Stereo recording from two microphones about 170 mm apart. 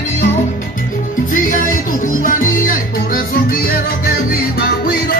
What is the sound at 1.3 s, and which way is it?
Music, 50° left (ahead or behind).